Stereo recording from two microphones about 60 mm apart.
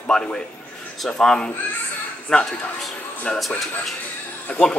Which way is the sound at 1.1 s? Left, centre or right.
Centre.